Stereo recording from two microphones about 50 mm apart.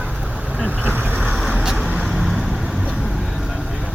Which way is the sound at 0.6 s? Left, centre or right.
Right.